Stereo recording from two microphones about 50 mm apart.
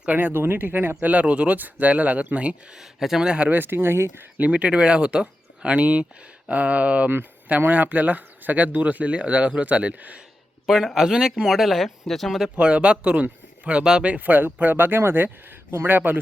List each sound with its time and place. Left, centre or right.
0.0 s speech: right
1.0 s speech: right
2.7 s speech: centre
3.2 s speech: right
3.5 s speech: right
4.4 s speech: right
10.7 s speech: centre
12.5 s speech: right
14.0 s speech: right